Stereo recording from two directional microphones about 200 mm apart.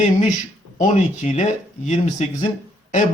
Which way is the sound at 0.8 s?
35° left (ahead or behind).